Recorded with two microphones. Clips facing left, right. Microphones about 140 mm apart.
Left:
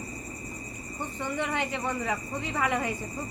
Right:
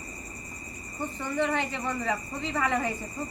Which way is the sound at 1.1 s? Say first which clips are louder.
Right 2 dB; 15° left (ahead or behind).